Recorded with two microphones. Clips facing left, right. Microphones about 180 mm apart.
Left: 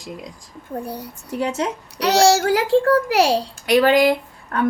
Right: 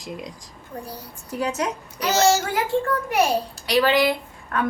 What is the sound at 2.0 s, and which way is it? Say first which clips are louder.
A child's voice: left 4 dB; 75° left (ahead or behind).